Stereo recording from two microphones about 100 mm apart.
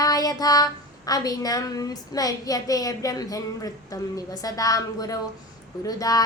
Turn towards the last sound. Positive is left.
turn(degrees=40)  # may be behind; listen again after turning